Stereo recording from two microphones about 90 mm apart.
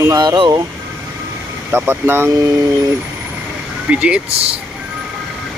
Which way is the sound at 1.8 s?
25° right (ahead or behind).